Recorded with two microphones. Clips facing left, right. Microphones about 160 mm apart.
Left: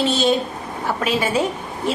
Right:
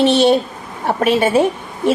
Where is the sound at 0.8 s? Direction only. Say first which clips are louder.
Right 6 dB; 60° right (ahead or behind).